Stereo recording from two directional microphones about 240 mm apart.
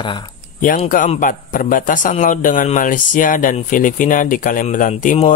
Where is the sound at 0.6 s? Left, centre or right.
Left.